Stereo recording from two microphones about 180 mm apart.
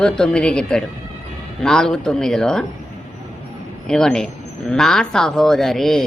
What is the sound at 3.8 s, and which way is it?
Speech, 5° left (ahead or behind).